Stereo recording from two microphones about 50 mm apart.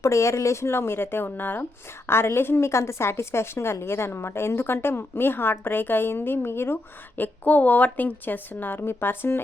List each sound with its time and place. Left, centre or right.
0.0 s a woman's voice: left
2.0 s a woman's voice: left
7.2 s speech: left